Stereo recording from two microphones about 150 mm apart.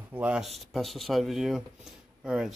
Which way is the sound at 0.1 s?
5° right (ahead or behind).